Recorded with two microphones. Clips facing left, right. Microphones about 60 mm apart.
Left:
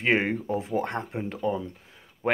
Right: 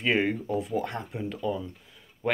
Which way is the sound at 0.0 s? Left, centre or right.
Left.